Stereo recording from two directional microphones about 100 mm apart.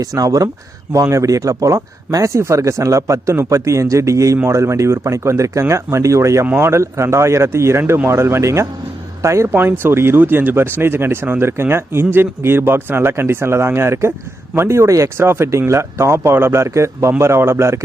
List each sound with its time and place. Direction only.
0.0 s speech: 35° right (ahead or behind)